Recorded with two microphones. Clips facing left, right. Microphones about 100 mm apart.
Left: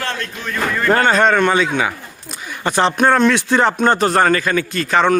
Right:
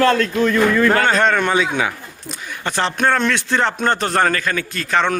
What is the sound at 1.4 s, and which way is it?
Speech, 5° right (ahead or behind).